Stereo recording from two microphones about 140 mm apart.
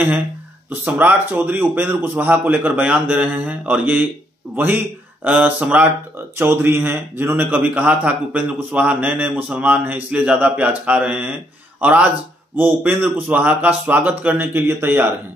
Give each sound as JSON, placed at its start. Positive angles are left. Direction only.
{"t": 0.7, "sound": "a man's voice", "side_deg": -15}
{"t": 5.2, "sound": "a man's voice", "side_deg": -10}